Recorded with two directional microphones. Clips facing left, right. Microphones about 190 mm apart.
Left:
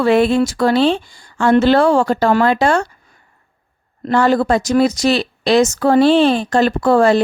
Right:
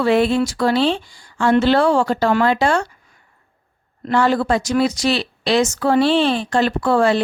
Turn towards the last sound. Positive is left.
turn(degrees=45)  # may be behind; listen again after turning